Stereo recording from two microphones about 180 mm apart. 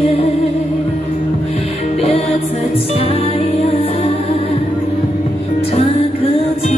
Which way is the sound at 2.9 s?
30° left (ahead or behind).